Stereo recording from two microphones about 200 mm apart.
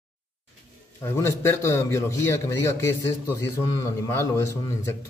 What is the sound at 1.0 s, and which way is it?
Speech, 15° left (ahead or behind).